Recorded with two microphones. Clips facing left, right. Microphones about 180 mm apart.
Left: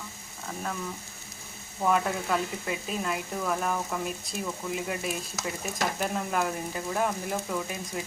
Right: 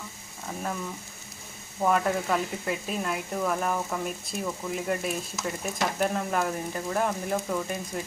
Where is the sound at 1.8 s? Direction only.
Centre (ahead or behind).